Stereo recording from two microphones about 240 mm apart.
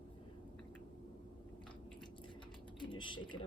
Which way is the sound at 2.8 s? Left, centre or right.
Centre.